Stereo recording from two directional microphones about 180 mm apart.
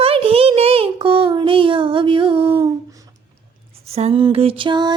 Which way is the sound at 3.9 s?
35° right (ahead or behind).